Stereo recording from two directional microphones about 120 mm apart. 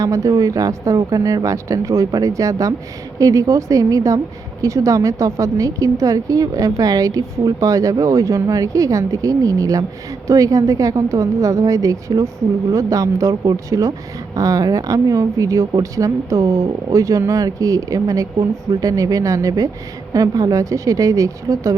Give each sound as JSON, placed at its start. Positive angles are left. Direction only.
{"t": 0.0, "sound": "a woman's voice", "side_deg": -30}